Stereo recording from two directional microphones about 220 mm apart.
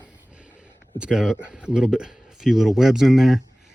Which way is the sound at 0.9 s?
5° right (ahead or behind).